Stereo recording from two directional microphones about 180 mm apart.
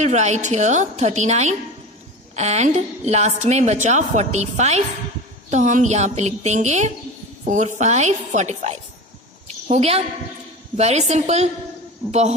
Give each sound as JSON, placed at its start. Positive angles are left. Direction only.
{"t": 0.0, "sound": "a woman's voice", "side_deg": -40}